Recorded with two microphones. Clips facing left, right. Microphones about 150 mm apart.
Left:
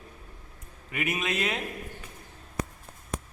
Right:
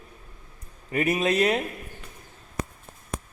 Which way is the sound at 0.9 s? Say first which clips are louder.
Right 8 dB; 35° right (ahead or behind).